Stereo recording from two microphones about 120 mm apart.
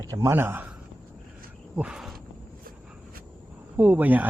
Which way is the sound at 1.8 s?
5° right (ahead or behind).